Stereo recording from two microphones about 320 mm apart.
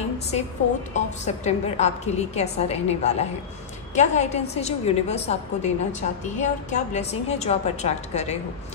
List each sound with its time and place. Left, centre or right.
0.9 s a woman's voice: left